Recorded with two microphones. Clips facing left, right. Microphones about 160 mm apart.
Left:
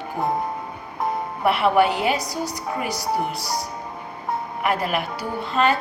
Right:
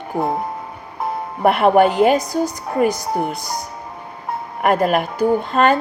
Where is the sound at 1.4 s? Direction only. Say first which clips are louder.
Right 5 dB; 50° right (ahead or behind).